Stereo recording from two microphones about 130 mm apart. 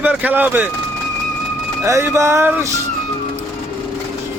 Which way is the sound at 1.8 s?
20° right (ahead or behind).